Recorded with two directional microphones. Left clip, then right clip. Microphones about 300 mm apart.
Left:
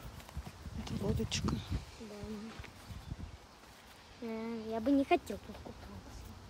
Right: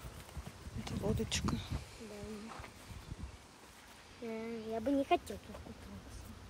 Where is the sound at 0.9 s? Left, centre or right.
Centre.